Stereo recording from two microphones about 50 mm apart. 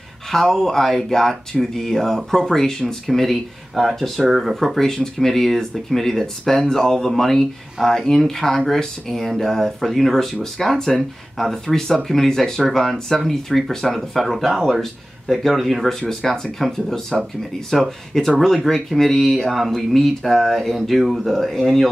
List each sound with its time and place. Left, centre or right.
0.3 s speech: centre
4.7 s speech: centre